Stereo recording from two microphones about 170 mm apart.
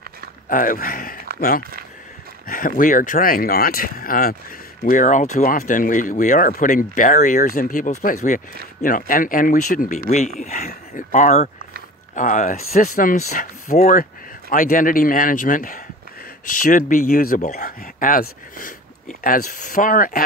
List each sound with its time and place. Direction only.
0.5 s speech: 55° left (ahead or behind)
2.4 s speech: 55° left (ahead or behind)